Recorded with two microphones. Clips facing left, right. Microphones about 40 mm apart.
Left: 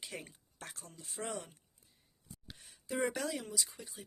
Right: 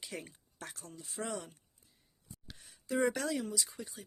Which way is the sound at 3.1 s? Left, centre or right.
Centre.